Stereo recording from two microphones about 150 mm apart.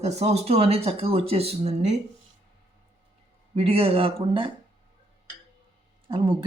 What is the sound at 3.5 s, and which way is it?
Speech, 40° right (ahead or behind).